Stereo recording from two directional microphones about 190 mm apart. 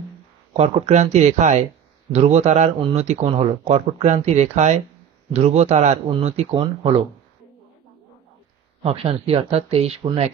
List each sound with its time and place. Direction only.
0.5 s speech: 35° right (ahead or behind)
8.8 s speech: 30° right (ahead or behind)